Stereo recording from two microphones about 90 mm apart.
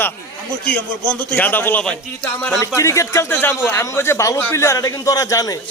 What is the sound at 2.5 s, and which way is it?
Speech, 35° left (ahead or behind).